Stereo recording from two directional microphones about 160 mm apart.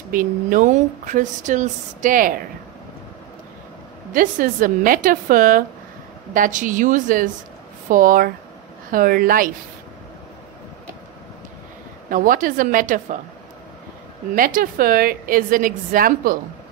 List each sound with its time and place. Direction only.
0.1 s speech: 55° right (ahead or behind)
4.1 s speech: 60° right (ahead or behind)
12.1 s speech: 55° right (ahead or behind)
14.3 s speech: 60° right (ahead or behind)